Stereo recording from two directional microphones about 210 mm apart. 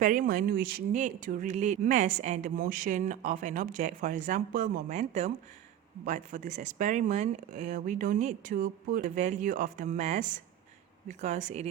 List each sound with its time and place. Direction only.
0.0 s speech: 40° right (ahead or behind)